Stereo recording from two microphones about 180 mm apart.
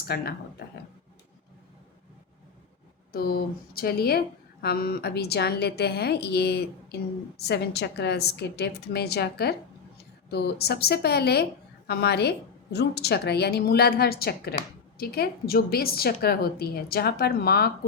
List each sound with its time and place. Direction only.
0.1 s a woman's voice: 65° left (ahead or behind)
3.1 s a woman's voice: 55° left (ahead or behind)